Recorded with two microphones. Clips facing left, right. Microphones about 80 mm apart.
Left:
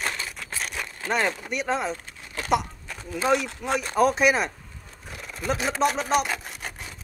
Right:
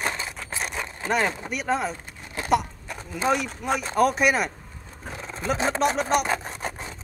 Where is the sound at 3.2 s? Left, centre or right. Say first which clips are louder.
Even; centre.